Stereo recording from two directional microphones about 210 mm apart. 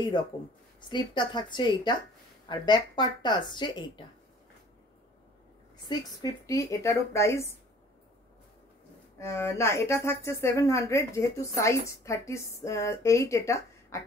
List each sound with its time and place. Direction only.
0.8 s speech: 20° left (ahead or behind)
5.9 s speech: 15° left (ahead or behind)
9.2 s speech: 15° left (ahead or behind)